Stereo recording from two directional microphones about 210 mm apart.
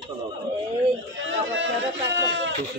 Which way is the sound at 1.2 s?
60° right (ahead or behind).